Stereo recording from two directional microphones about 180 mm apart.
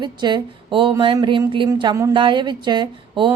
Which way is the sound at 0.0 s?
25° right (ahead or behind).